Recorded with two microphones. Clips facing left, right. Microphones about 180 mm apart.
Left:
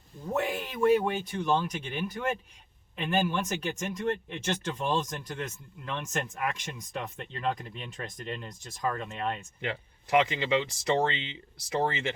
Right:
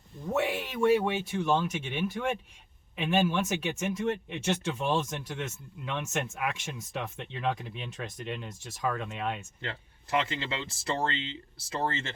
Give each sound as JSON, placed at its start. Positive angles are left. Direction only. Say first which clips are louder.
{"t": 0.3, "sound": "speech", "louder": "right 1 dB", "side_deg": -5}
{"t": 9.6, "sound": "speech", "louder": "left 5 dB", "side_deg": 15}